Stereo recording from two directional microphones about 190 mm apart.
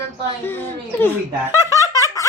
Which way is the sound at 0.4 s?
10° left (ahead or behind).